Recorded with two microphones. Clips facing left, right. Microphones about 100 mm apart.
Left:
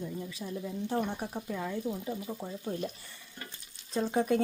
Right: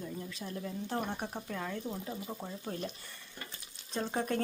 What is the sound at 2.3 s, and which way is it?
Speech, 10° right (ahead or behind).